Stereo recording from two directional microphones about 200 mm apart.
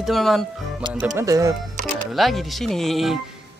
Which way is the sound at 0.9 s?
10° right (ahead or behind).